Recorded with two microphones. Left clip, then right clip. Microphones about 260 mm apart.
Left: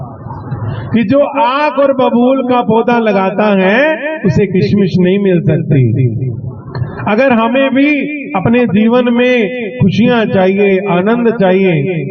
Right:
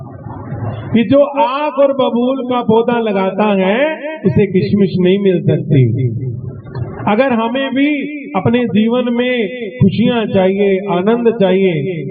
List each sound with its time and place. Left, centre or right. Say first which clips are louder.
0.9 s a man's voice: even; left